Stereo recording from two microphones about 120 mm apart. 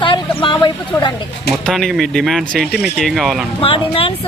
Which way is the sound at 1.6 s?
Centre (ahead or behind).